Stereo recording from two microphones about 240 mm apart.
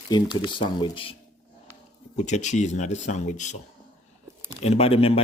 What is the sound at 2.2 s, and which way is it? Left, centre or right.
Speech, left.